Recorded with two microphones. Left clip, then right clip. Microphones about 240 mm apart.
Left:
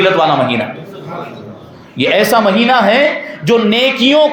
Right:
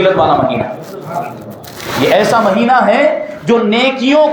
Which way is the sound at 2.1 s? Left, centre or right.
Left.